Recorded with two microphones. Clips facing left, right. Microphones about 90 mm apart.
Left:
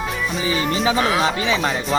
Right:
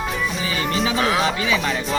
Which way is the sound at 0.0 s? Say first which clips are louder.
Even; centre (ahead or behind).